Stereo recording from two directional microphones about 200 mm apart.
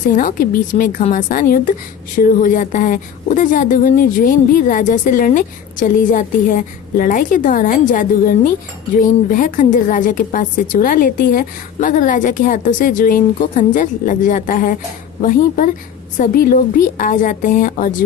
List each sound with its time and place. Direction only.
0.2 s a woman's voice: 40° left (ahead or behind)